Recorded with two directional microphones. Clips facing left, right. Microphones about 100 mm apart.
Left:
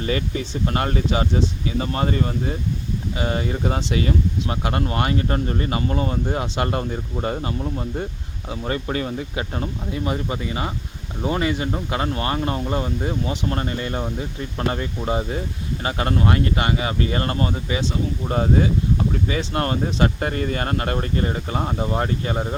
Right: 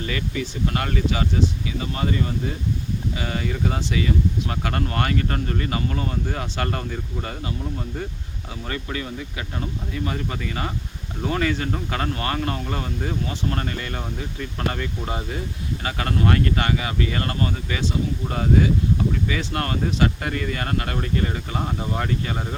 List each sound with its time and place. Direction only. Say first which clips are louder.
0.0 s speech: left 3 dB; 30° left (ahead or behind)